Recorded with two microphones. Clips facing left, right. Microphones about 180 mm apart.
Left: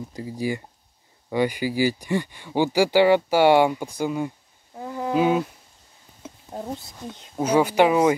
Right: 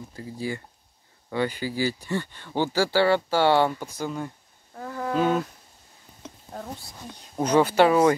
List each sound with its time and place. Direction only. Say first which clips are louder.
0.1 s speech: left 4 dB; 15° left (ahead or behind)
4.7 s a sound: left 3 dB; 20° left (ahead or behind)
6.5 s speech: left 5 dB; 20° left (ahead or behind)
7.3 s speech: left 1 dB; 10° left (ahead or behind)